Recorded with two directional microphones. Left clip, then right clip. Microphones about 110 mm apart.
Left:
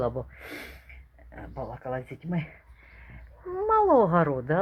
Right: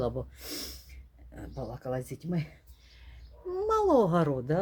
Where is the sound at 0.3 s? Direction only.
30° right (ahead or behind).